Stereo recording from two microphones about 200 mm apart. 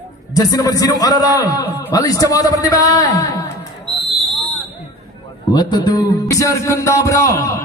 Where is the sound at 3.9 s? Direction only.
5° left (ahead or behind).